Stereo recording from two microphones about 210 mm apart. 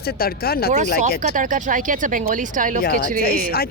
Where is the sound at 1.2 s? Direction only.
40° right (ahead or behind).